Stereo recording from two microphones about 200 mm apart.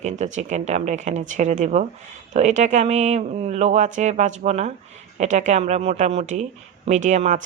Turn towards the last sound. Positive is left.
turn(degrees=-35)  # may be behind; listen again after turning